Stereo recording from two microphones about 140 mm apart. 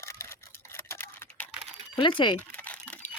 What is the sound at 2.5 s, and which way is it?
Typing, 10° left (ahead or behind).